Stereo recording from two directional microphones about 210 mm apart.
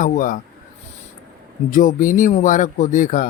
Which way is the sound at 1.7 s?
40° left (ahead or behind).